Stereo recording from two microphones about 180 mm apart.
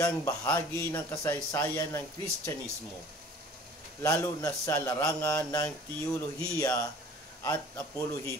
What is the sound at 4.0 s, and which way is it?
A man's voice, 15° left (ahead or behind).